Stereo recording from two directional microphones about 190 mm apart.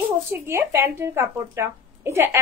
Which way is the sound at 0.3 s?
15° right (ahead or behind).